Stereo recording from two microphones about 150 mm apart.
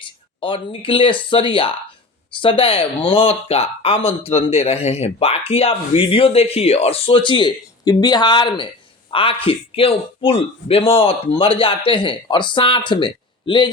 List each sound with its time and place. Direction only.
0.0 s speech: 35° left (ahead or behind)